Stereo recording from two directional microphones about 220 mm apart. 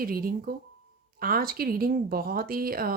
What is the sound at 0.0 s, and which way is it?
Speech, 40° right (ahead or behind).